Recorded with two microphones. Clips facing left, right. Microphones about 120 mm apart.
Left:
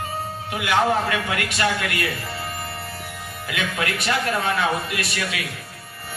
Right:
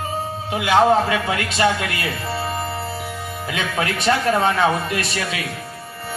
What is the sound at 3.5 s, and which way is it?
Speech, 30° right (ahead or behind).